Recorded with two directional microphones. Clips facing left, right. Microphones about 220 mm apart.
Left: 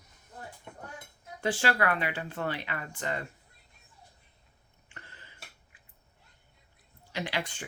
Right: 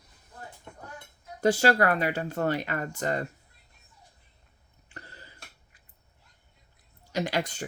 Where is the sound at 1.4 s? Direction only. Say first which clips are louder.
Right 6 dB; 40° right (ahead or behind).